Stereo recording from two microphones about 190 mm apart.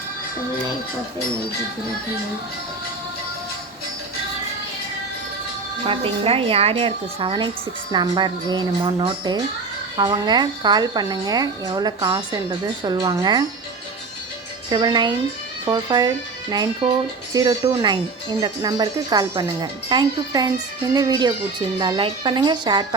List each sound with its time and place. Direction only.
5.8 s speech: 30° right (ahead or behind)
14.7 s speech: 20° right (ahead or behind)